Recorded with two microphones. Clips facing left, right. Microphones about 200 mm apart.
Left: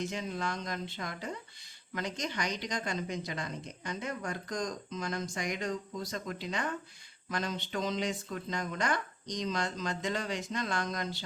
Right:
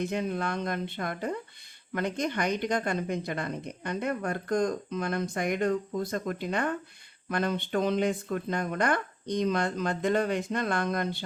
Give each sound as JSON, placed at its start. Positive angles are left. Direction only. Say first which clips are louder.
{"t": 0.0, "sound": "speech", "louder": "right 6 dB", "side_deg": -55}